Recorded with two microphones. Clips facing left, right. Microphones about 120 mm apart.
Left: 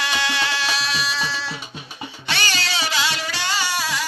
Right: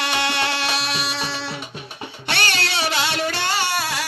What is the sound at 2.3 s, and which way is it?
Music, 60° right (ahead or behind).